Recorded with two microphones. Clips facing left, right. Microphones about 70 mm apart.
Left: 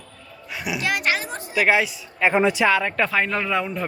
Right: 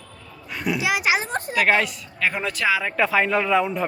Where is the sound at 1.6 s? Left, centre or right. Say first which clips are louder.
Left 1 dB; centre.